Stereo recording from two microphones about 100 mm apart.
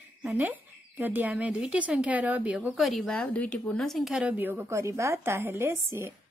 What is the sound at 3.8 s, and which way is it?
Speech, centre (ahead or behind).